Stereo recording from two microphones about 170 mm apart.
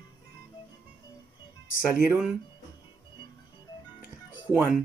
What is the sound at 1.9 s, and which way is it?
Speech, 5° right (ahead or behind).